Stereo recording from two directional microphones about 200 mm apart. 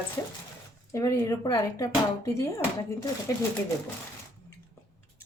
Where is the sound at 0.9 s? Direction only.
15° left (ahead or behind).